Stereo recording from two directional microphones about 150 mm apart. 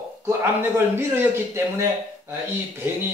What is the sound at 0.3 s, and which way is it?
A man's voice, 15° right (ahead or behind).